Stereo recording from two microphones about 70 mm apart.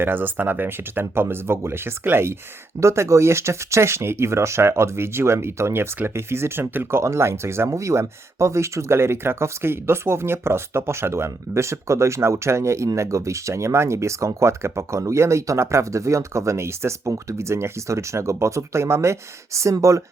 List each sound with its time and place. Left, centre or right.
0.0 s speech: right